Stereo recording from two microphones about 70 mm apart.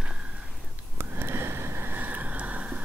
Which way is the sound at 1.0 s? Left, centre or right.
Right.